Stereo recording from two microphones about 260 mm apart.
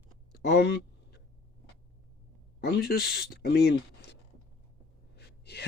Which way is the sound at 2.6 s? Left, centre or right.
Left.